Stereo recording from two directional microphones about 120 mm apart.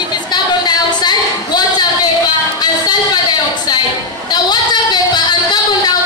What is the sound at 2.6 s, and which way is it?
Music, 35° left (ahead or behind).